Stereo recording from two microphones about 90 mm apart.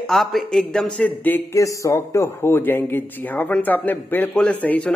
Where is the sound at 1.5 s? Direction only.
35° left (ahead or behind).